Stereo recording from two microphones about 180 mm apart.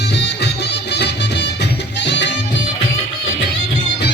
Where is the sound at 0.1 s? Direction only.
75° left (ahead or behind).